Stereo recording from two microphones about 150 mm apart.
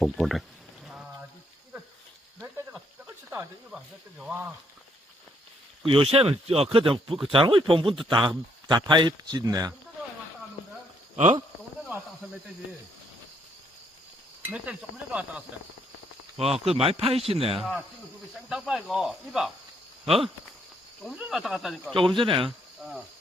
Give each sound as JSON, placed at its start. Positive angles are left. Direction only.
{"t": 0.0, "sound": "speech", "side_deg": 0}
{"t": 3.2, "sound": "speech", "side_deg": -10}
{"t": 4.2, "sound": "a sound", "side_deg": -10}
{"t": 5.8, "sound": "speech", "side_deg": -40}
{"t": 14.4, "sound": "a sound", "side_deg": -10}
{"t": 16.4, "sound": "speech", "side_deg": -40}
{"t": 17.6, "sound": "speech", "side_deg": 0}
{"t": 21.0, "sound": "speech", "side_deg": 0}
{"t": 21.9, "sound": "speech", "side_deg": -35}
{"t": 22.8, "sound": "speech", "side_deg": -5}